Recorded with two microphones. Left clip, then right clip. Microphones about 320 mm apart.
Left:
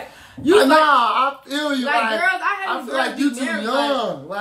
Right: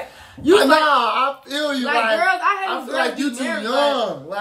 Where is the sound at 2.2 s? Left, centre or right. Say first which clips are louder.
Right 2 dB; centre.